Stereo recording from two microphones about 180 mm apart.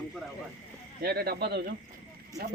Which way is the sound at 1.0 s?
60° right (ahead or behind).